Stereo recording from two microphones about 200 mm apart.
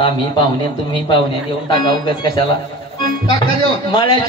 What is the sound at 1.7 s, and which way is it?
Speech, 20° left (ahead or behind).